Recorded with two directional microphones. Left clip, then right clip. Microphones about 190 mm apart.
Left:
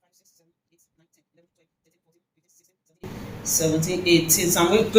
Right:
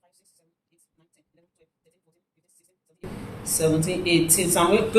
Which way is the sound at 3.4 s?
20° right (ahead or behind).